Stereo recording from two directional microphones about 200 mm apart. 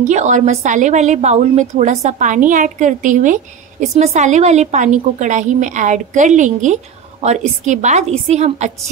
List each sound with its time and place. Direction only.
0.0 s a woman's voice: 35° right (ahead or behind)